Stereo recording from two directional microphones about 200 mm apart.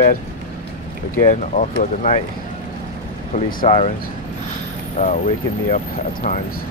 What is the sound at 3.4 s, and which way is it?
Speech, 40° left (ahead or behind).